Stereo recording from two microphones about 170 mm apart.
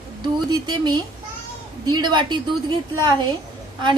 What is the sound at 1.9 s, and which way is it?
Speech, 25° right (ahead or behind).